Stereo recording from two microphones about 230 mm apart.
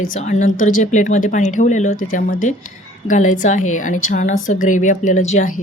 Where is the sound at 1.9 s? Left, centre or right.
Left.